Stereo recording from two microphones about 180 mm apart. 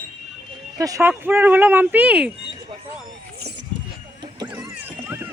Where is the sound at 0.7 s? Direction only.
20° right (ahead or behind).